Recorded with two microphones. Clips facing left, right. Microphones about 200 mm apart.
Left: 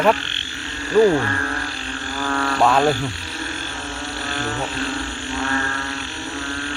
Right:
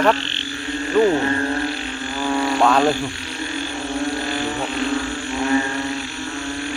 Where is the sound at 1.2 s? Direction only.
25° right (ahead or behind).